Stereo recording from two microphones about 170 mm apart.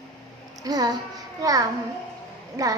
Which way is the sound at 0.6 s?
25° right (ahead or behind).